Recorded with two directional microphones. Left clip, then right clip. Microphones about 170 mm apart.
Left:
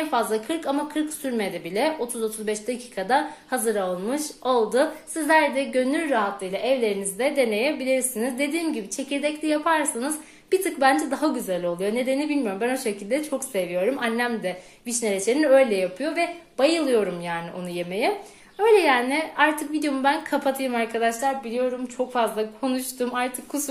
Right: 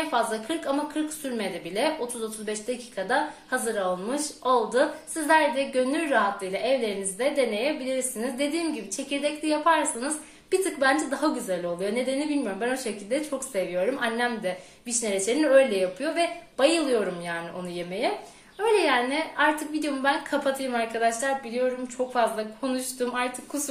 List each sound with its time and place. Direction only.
0.1 s a woman's voice: 35° left (ahead or behind)